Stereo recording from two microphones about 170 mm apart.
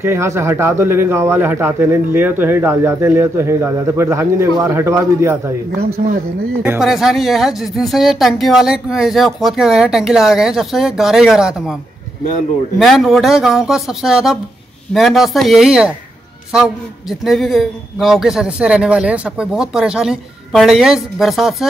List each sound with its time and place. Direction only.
0.0 s speech: 15° right (ahead or behind)
6.8 s speech: centre (ahead or behind)
12.7 s speech: centre (ahead or behind)
17.2 s speech: centre (ahead or behind)